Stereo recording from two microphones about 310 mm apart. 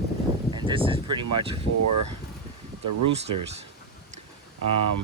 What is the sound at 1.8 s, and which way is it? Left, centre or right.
Speech, right.